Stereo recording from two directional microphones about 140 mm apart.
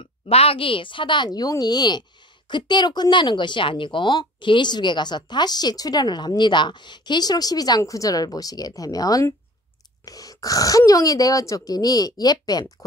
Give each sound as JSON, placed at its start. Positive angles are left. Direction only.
{"t": 0.0, "sound": "a woman's voice", "side_deg": 45}